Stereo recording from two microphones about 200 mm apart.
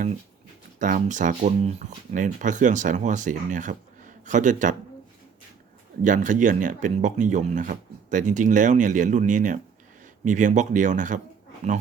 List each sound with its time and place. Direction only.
0.8 s speech: 40° right (ahead or behind)
6.0 s speech: 40° right (ahead or behind)